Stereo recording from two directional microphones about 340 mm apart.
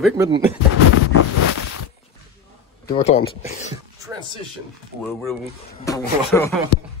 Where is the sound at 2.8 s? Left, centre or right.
Centre.